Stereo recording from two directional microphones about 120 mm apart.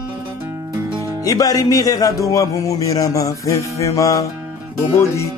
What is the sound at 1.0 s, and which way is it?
Music, 30° left (ahead or behind).